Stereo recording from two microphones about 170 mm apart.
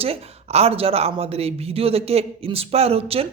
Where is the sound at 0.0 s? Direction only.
35° right (ahead or behind).